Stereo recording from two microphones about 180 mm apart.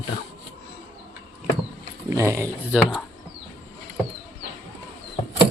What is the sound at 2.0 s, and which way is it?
Speech, 15° right (ahead or behind).